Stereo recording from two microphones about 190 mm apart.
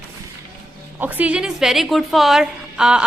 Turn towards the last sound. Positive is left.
turn(degrees=-5)  # may be behind; listen again after turning